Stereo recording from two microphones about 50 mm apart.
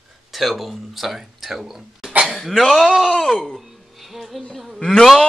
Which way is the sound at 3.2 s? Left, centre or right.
Centre.